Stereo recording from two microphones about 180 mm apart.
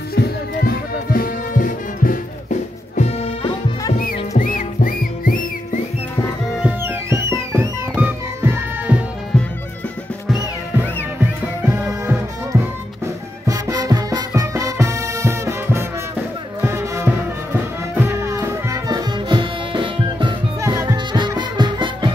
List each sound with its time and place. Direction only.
0.1 s music: 60° left (ahead or behind)
4.4 s music: 50° left (ahead or behind)
6.6 s music: 15° right (ahead or behind)
11.6 s music: 15° right (ahead or behind)